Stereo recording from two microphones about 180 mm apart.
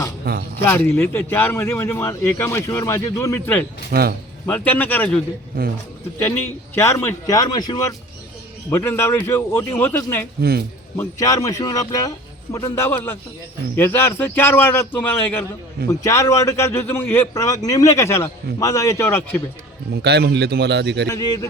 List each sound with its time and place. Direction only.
0.3 s a man's voice: 55° right (ahead or behind)
0.6 s a man's voice: 10° left (ahead or behind)
3.9 s a man's voice: 55° right (ahead or behind)
4.4 s a man's voice: 10° left (ahead or behind)
5.5 s a man's voice: 55° right (ahead or behind)
6.7 s a man's voice: 15° left (ahead or behind)
19.9 s speech: 65° right (ahead or behind)
21.1 s a man's voice: 20° left (ahead or behind)